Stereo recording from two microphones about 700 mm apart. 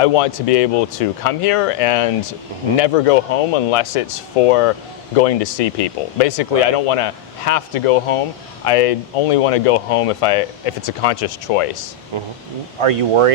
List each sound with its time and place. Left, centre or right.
0.0 s speech: left
12.1 s speech: right